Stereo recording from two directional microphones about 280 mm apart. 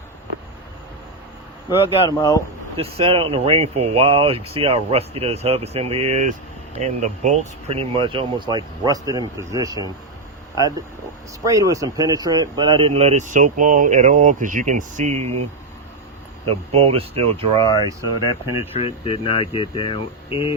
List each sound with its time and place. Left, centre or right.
1.9 s speech: centre
2.7 s speech: centre
11.4 s speech: centre
16.5 s speech: right
18.8 s speech: left